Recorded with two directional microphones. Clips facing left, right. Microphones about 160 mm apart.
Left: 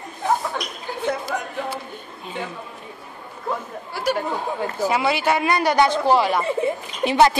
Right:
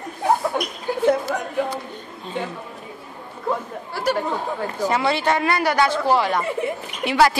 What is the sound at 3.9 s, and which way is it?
Speech, 5° left (ahead or behind).